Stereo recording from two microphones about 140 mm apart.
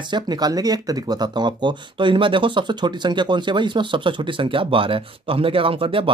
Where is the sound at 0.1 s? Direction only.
30° right (ahead or behind).